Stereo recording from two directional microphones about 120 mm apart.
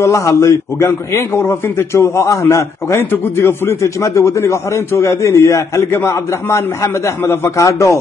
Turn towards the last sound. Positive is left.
turn(degrees=25)  # may be behind; listen again after turning